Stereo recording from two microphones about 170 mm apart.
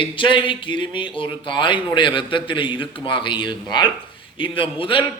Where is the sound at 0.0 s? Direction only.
30° left (ahead or behind).